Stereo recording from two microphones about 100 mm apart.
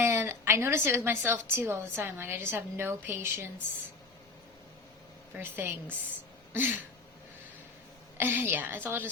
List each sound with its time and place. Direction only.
0.0 s a woman's voice: 25° right (ahead or behind)
5.4 s a woman's voice: 20° right (ahead or behind)
6.5 s a sound: 20° right (ahead or behind)
8.2 s a woman's voice: 20° right (ahead or behind)